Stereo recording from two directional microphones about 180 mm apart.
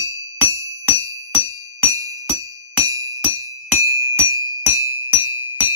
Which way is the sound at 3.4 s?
15° right (ahead or behind).